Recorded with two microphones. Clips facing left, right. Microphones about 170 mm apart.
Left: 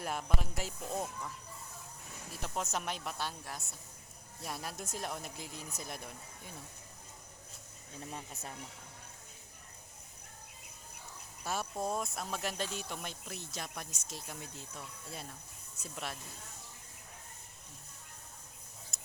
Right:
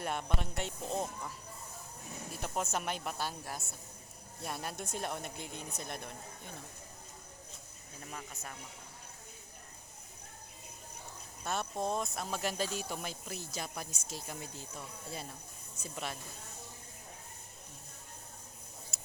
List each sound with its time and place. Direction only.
0.0 s speech: centre (ahead or behind)
2.3 s speech: 5° right (ahead or behind)
8.1 s speech: 30° left (ahead or behind)
11.4 s speech: 5° left (ahead or behind)
18.9 s tick-tock: 5° right (ahead or behind)